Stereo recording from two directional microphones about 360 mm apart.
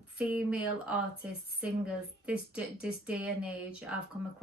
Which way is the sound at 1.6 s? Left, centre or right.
Centre.